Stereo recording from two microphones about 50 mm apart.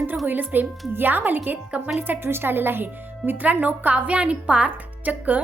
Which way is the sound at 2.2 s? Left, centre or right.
Right.